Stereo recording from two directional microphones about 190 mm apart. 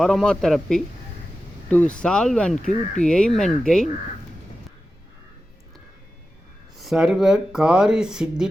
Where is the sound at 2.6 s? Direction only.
40° left (ahead or behind).